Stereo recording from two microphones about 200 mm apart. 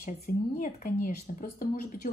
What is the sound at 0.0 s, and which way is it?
Speech, 45° left (ahead or behind).